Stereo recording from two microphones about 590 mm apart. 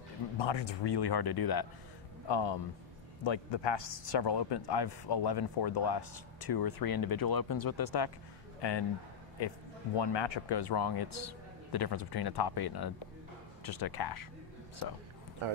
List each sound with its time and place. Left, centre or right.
0.4 s a man's voice: left
9.9 s a man's voice: left